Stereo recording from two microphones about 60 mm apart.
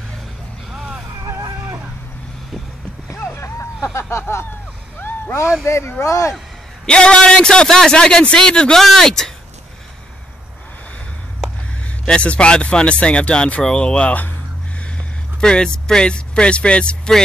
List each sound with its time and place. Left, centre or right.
0.7 s vehicle: centre
1.2 s vehicle: right
3.3 s vehicle: left
4.9 s a sound: left
5.7 s speech: left
6.9 s a man's voice: centre
12.1 s speech: centre